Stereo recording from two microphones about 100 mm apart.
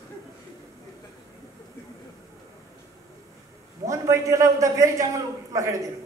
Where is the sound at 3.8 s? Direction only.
30° right (ahead or behind).